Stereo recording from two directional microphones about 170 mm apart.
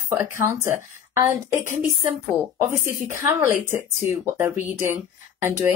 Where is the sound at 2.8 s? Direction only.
15° right (ahead or behind).